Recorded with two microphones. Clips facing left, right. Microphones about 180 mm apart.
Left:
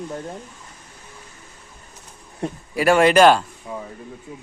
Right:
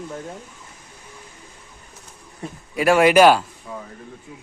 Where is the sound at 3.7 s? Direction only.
20° left (ahead or behind).